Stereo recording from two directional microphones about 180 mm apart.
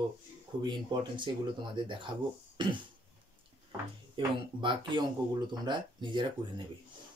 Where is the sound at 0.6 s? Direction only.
25° right (ahead or behind).